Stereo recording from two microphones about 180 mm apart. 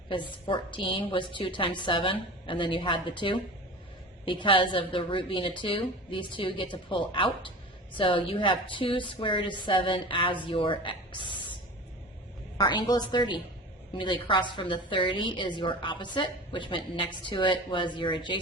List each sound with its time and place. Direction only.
0.1 s a woman's voice: 25° left (ahead or behind)
12.5 s a woman's voice: 25° left (ahead or behind)